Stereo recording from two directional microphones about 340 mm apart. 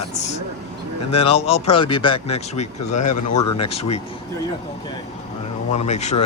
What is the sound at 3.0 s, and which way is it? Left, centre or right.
Speech, left.